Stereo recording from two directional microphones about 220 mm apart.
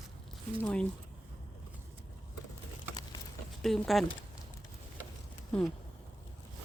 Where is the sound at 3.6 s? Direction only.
Centre (ahead or behind).